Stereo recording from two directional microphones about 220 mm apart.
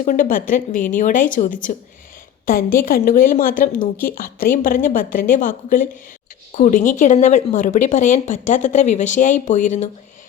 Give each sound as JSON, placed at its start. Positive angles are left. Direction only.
{"t": 0.0, "sound": "speech", "side_deg": 40}
{"t": 2.5, "sound": "speech", "side_deg": 40}